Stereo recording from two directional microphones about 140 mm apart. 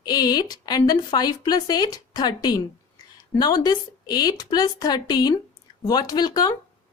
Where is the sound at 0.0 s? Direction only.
30° left (ahead or behind).